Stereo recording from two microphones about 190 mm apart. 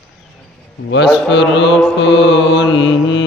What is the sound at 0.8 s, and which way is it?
Mantra, 65° left (ahead or behind).